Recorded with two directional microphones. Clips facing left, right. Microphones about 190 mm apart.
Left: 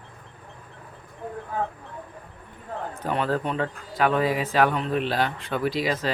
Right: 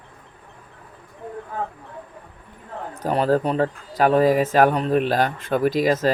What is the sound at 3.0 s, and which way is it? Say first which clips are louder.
Speech: right 6 dB; 40° right (ahead or behind).